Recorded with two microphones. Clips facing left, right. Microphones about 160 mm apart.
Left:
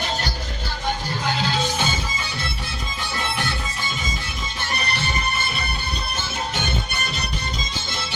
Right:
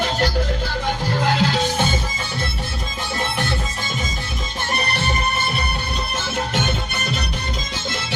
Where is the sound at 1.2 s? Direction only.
70° right (ahead or behind).